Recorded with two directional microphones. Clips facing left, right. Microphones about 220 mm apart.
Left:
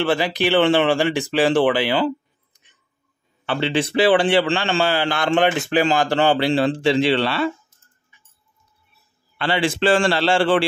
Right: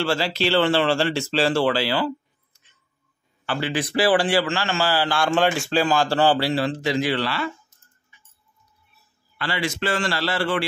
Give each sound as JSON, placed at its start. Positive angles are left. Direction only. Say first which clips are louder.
{"t": 0.0, "sound": "a man's voice", "louder": "left 3 dB", "side_deg": 20}
{"t": 9.4, "sound": "a man's voice", "louder": "left 6 dB", "side_deg": 30}